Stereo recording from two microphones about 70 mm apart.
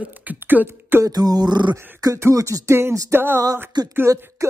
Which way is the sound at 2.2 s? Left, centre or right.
Right.